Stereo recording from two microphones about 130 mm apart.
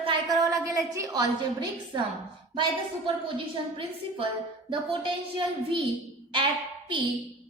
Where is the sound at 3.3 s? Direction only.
40° right (ahead or behind).